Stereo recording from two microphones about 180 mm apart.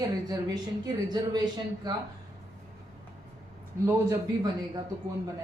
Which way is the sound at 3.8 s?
20° right (ahead or behind).